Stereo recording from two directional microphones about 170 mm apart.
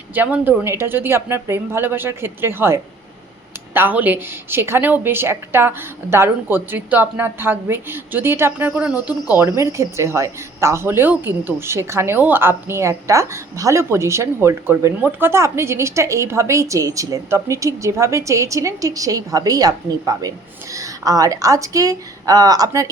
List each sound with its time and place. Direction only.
0.1 s a woman's voice: 10° right (ahead or behind)